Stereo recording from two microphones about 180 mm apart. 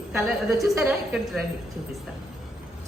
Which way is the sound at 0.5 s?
15° right (ahead or behind).